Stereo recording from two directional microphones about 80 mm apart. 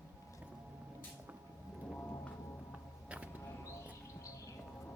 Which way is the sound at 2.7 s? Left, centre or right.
Centre.